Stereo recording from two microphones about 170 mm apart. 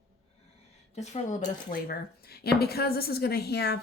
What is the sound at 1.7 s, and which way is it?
A woman's voice, 65° left (ahead or behind).